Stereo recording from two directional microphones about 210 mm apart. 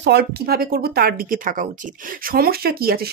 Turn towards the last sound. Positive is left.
turn(degrees=-45)  # may be behind; listen again after turning